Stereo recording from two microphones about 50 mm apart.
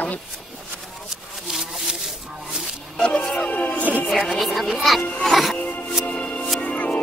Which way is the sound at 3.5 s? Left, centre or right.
Left.